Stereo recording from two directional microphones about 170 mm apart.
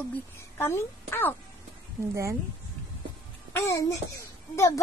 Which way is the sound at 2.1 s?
15° right (ahead or behind).